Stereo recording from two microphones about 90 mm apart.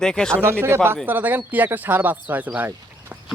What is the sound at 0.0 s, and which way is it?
Speech, 5° left (ahead or behind).